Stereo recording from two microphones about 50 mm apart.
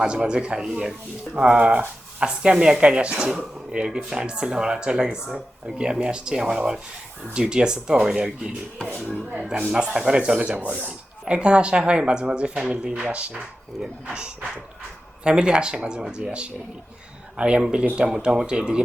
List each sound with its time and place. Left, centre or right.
0.0 s speech: centre
9.7 s speech: centre
10.6 s speech: right
13.8 s speech: centre